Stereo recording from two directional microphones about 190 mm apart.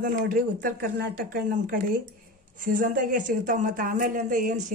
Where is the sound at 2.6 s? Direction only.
45° right (ahead or behind).